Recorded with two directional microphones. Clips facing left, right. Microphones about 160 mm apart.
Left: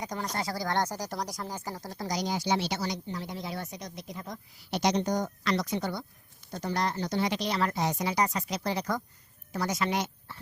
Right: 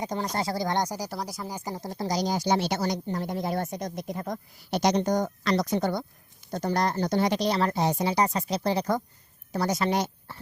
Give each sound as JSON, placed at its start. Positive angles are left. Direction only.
{"t": 0.0, "sound": "a woman's voice", "side_deg": -30}